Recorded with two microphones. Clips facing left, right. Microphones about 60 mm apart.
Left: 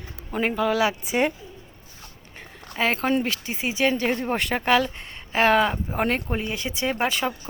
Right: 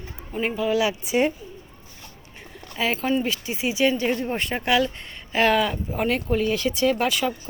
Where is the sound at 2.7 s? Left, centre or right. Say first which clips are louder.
Left 1 dB; left.